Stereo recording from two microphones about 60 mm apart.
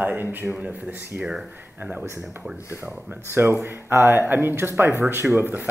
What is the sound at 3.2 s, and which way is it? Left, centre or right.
Speech, right.